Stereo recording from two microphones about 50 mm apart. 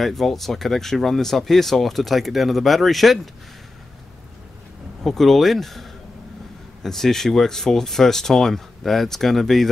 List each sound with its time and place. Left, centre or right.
0.0 s speech: centre
5.0 s speech: centre